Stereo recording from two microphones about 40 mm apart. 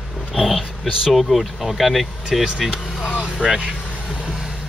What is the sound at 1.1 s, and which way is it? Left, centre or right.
Speech, centre.